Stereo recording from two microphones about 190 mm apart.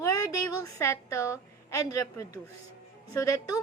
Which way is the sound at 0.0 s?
20° left (ahead or behind).